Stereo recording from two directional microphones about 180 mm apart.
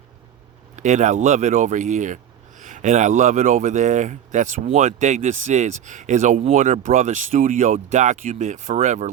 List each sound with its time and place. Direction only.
0.8 s speech: 40° right (ahead or behind)